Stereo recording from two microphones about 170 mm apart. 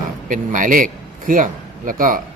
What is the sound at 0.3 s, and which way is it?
A man's voice, 50° right (ahead or behind).